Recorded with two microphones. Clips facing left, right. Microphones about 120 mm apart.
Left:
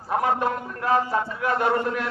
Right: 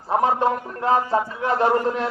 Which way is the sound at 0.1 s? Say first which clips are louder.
Right 4 dB; 25° right (ahead or behind).